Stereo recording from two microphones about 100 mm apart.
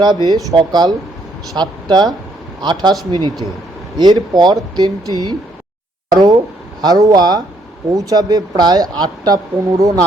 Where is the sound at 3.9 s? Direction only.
45° right (ahead or behind).